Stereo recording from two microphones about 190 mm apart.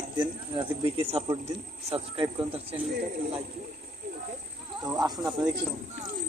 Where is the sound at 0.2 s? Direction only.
25° right (ahead or behind).